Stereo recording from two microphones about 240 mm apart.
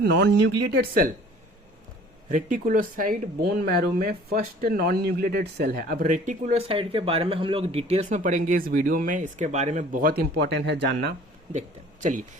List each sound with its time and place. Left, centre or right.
0.0 s speech: right
2.3 s speech: right
11.5 s a man's voice: right